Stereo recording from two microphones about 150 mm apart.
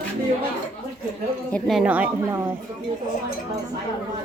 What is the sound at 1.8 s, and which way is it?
Speech, 10° right (ahead or behind).